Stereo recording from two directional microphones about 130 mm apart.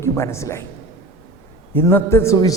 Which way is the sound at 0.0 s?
20° left (ahead or behind).